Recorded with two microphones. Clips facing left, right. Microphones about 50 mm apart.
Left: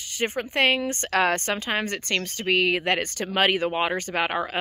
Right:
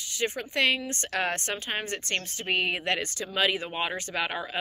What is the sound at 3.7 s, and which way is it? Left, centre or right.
Speech, left.